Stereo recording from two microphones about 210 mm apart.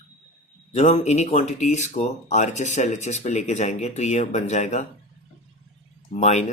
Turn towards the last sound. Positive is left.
turn(degrees=35)  # may be behind; listen again after turning